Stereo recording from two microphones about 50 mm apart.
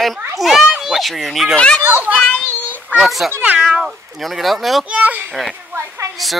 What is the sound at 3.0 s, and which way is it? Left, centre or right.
Speech, centre.